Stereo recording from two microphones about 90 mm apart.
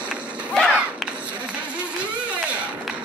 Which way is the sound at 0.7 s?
10° right (ahead or behind).